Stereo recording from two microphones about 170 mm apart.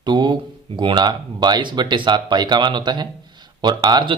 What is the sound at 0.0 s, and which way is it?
A man's voice, 25° right (ahead or behind).